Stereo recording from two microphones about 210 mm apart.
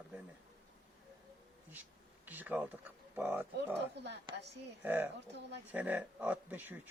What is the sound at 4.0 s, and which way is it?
Speech, 55° right (ahead or behind).